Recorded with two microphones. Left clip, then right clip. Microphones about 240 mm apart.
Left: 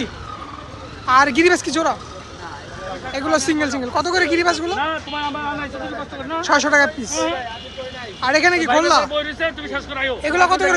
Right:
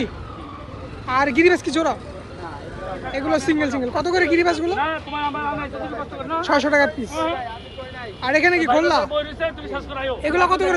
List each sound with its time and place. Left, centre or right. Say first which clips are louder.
1.0 s speech: left 3 dB; centre
3.1 s speech: left 2 dB; centre
4.8 s a man's voice: left 1 dB; left
6.4 s speech: left 3 dB; centre
7.2 s speech: left 2 dB; left
8.2 s speech: left 2 dB; centre
9.1 s speech: left 2 dB; left
10.2 s speech: left 2 dB; centre